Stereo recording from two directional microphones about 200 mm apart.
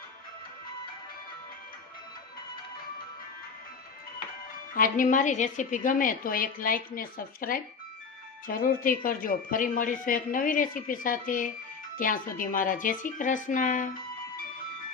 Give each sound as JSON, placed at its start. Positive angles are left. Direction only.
{"t": 4.7, "sound": "a woman's voice", "side_deg": 40}